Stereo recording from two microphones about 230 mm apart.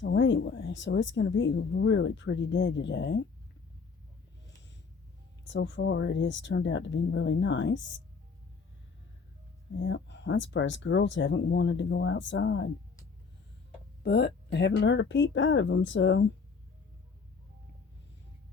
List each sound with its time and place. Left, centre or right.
0.0 s speech: left
5.5 s speech: left
9.7 s speech: left
14.0 s speech: left